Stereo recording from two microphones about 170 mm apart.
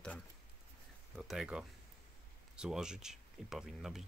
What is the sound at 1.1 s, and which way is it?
Speech, centre (ahead or behind).